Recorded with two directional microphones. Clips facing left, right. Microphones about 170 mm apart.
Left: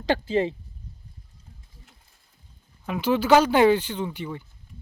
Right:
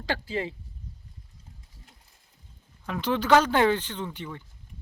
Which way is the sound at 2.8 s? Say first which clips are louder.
Left 4 dB; 10° left (ahead or behind).